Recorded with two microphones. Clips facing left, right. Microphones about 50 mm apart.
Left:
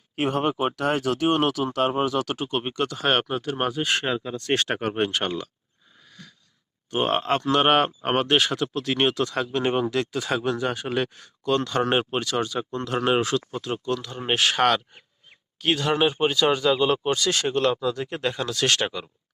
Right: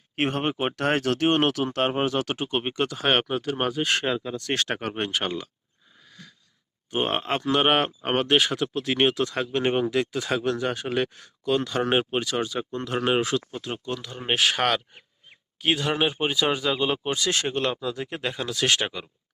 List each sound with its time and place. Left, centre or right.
0.2 s speech: right; by 4.4 s centre
4.4 s speech: left
4.7 s speech: centre
6.9 s speech: centre
9.9 s speech: centre
14.2 s speech: centre
15.3 s speech: centre
17.2 s speech: right